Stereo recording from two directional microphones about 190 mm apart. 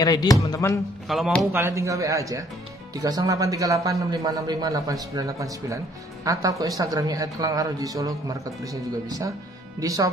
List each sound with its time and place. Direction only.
0.0 s speech: 20° left (ahead or behind)
1.0 s speech: centre (ahead or behind)
1.5 s a man's voice: 15° right (ahead or behind)